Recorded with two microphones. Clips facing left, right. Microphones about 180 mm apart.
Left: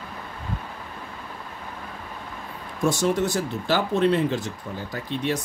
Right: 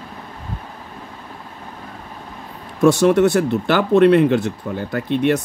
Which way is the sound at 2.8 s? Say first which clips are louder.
Right 9 dB; 65° right (ahead or behind).